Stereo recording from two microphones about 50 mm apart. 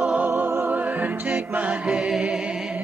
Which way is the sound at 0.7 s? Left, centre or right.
Right.